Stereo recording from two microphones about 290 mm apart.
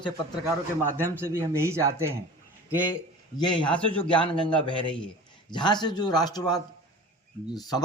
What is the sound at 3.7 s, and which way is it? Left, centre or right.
Speech, centre.